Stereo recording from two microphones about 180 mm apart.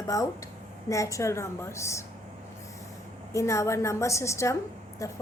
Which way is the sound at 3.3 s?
15° left (ahead or behind).